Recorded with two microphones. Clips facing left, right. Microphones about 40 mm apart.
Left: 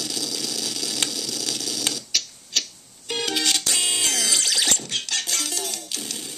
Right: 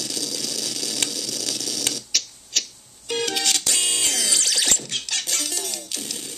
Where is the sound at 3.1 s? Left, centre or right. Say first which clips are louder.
Even; centre.